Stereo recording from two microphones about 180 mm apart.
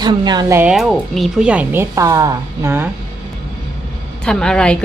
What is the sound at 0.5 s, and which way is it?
Speech, 5° right (ahead or behind).